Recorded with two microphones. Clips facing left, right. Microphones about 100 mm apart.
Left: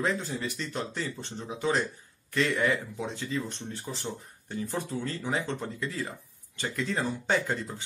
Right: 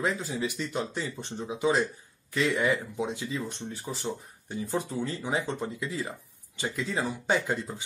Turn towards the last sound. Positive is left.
turn(degrees=-10)  # may be behind; listen again after turning